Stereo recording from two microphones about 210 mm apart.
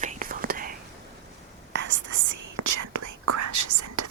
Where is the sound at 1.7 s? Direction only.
60° right (ahead or behind).